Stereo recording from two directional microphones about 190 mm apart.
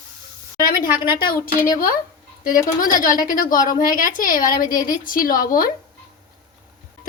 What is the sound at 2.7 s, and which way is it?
A woman's voice, 45° left (ahead or behind).